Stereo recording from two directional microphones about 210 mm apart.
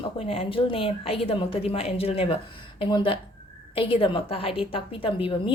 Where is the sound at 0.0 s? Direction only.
25° left (ahead or behind).